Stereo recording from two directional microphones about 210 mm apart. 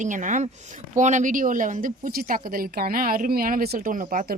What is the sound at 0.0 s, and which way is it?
A woman's voice, 35° right (ahead or behind).